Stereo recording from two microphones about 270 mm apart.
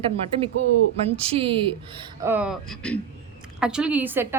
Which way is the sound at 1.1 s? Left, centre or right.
Right.